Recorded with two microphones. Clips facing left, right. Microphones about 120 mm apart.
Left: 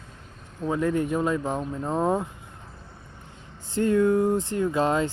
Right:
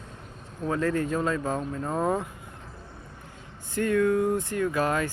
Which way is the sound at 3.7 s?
25° left (ahead or behind).